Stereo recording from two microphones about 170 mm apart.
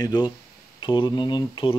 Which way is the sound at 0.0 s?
25° left (ahead or behind).